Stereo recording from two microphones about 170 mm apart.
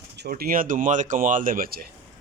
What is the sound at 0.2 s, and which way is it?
A man's voice, 60° right (ahead or behind).